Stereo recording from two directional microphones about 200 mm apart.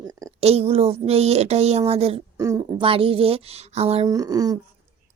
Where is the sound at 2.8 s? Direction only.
25° right (ahead or behind).